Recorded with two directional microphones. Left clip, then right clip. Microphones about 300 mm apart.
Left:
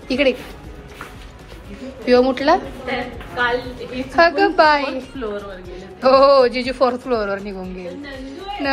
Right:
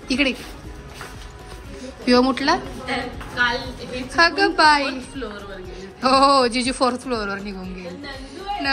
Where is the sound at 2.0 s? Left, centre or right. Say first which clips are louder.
Left 3 dB; centre.